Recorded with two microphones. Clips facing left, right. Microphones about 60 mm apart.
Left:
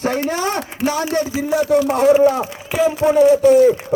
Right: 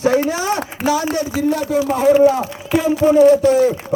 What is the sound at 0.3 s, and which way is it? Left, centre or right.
Speech, left.